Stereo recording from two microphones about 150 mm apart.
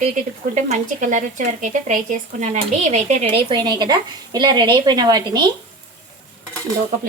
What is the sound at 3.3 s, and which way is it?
Frying, 30° right (ahead or behind).